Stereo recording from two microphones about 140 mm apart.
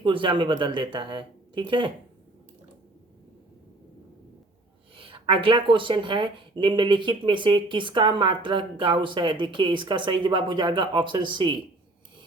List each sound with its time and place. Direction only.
0.0 s speech: 35° right (ahead or behind)
4.9 s speech: 40° right (ahead or behind)